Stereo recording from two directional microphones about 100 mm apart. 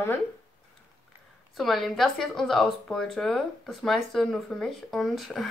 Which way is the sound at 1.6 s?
Centre (ahead or behind).